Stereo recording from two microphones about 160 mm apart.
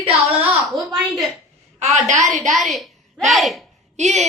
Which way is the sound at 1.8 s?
45° right (ahead or behind).